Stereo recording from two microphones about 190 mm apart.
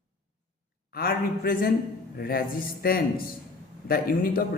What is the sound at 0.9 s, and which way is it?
Speech, 50° left (ahead or behind).